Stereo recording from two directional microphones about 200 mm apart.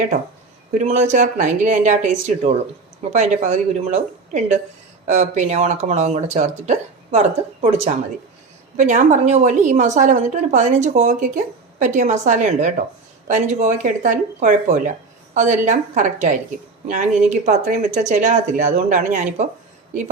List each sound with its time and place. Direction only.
0.7 s speech: 35° right (ahead or behind)
8.7 s speech: 40° right (ahead or behind)